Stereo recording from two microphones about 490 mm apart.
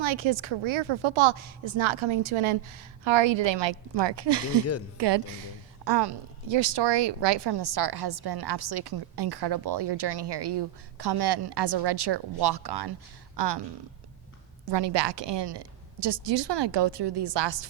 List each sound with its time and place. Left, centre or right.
0.0 s a woman's voice: right
14.6 s a woman's voice: right